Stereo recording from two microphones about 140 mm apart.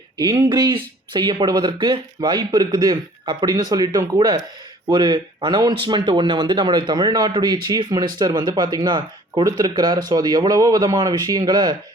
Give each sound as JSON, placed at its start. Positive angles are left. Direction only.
{"t": 0.2, "sound": "speech", "side_deg": -25}